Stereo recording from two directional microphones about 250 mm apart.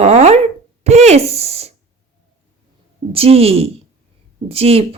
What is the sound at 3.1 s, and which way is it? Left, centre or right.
A woman's voice, right.